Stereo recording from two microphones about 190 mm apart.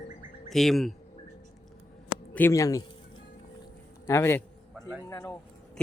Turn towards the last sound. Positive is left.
turn(degrees=15)  # may be behind; listen again after turning